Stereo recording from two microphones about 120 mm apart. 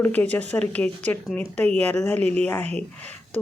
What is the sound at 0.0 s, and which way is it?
A woman's voice, 15° left (ahead or behind).